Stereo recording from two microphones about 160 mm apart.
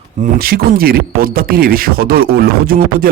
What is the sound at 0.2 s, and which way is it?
Speech, 70° right (ahead or behind).